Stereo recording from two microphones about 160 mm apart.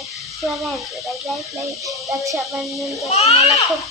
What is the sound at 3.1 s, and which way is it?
Speech, 40° left (ahead or behind).